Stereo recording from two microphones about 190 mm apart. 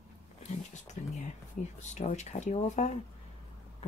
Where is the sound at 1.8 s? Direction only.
40° left (ahead or behind).